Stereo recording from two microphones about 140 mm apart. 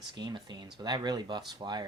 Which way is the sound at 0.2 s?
30° right (ahead or behind).